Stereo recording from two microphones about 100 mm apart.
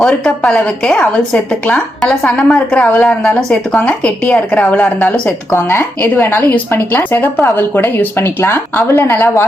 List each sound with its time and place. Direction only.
0.0 s a woman's voice: 10° left (ahead or behind)
5.5 s speech: 25° left (ahead or behind)